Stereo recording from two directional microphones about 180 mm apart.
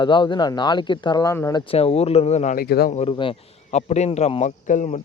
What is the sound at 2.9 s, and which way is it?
Speech, 30° left (ahead or behind).